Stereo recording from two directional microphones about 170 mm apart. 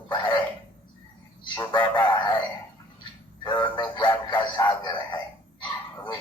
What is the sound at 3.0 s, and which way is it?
Music, 25° left (ahead or behind).